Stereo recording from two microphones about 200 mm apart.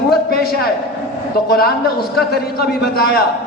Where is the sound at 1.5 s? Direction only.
50° left (ahead or behind).